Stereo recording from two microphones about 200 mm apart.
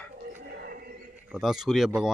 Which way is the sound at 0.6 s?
50° right (ahead or behind).